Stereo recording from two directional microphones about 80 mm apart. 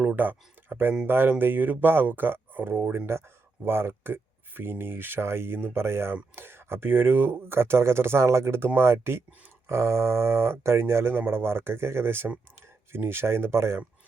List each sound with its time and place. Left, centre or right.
0.0 s speech: right